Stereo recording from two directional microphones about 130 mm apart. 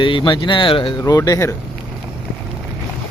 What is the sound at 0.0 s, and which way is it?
Speech, 40° left (ahead or behind).